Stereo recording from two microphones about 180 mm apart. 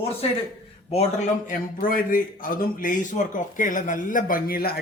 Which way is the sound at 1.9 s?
50° left (ahead or behind).